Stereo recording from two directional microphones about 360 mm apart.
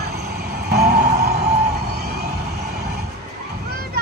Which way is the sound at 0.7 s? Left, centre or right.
Right.